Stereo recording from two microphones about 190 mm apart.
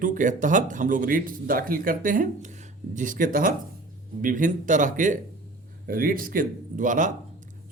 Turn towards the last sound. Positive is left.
turn(degrees=-40)  # may be behind; listen again after turning